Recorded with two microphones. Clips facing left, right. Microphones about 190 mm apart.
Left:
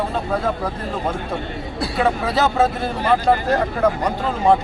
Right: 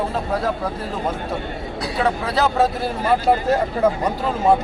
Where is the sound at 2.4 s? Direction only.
Centre (ahead or behind).